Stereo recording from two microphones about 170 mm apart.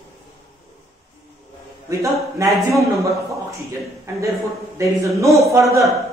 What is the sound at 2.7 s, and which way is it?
Speech, 20° right (ahead or behind).